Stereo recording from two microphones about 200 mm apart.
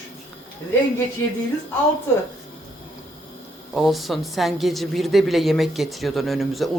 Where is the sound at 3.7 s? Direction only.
Centre (ahead or behind).